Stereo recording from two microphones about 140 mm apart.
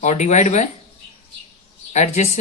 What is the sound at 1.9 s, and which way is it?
Speech, 55° left (ahead or behind).